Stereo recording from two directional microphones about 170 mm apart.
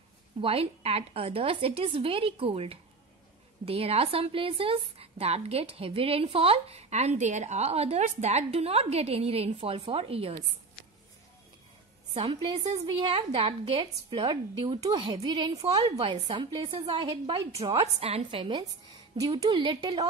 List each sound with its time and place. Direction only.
0.4 s a woman's voice: 35° right (ahead or behind)
12.1 s a woman's voice: 30° right (ahead or behind)